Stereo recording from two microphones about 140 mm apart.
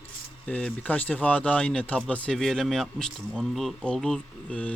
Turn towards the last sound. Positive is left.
turn(degrees=5)  # may be behind; listen again after turning